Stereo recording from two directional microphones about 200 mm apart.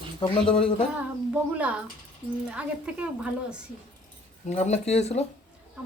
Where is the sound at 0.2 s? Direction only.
25° left (ahead or behind).